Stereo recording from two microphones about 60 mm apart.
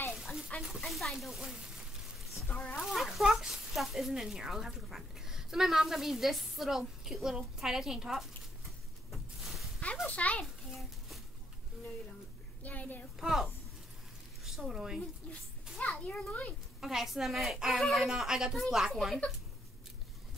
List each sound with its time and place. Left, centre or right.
0.1 s a sound: centre
0.7 s speech: centre
2.8 s speech: centre
10.0 s a child's voice: left
10.4 s a sound: centre
12.6 s a child's voice: left
13.2 s speech: centre
15.9 s a child's voice: centre
16.8 s speech: centre